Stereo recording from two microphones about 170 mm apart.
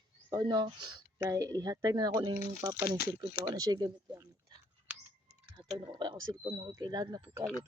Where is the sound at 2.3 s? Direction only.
45° left (ahead or behind).